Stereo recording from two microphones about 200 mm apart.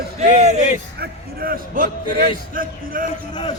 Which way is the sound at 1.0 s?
50° right (ahead or behind).